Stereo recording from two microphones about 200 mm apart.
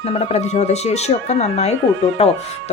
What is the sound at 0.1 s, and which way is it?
Speech, 35° left (ahead or behind).